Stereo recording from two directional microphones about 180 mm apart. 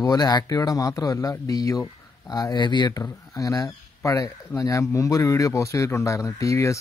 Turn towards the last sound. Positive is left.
turn(degrees=15)  # may be behind; listen again after turning